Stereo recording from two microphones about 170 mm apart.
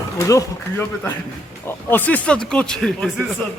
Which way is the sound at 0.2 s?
20° left (ahead or behind).